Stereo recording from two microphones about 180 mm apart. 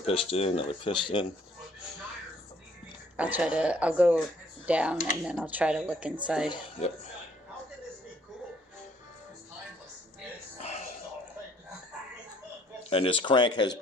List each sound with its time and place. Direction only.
0.0 s speech: 35° left (ahead or behind)
3.2 s speech: 10° right (ahead or behind)
6.5 s speech: 35° left (ahead or behind)
12.9 s speech: 30° left (ahead or behind)